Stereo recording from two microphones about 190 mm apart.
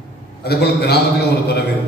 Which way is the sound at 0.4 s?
60° left (ahead or behind).